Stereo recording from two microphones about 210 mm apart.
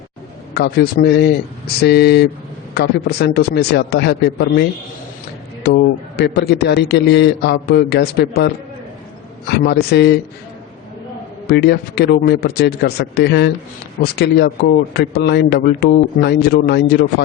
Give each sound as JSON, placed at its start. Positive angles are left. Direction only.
{"t": 0.5, "sound": "speech", "side_deg": 50}
{"t": 5.6, "sound": "speech", "side_deg": 55}
{"t": 9.5, "sound": "speech", "side_deg": 50}
{"t": 11.4, "sound": "speech", "side_deg": 50}